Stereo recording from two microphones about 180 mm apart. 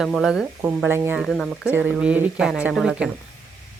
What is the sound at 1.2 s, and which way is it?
Speech, centre (ahead or behind).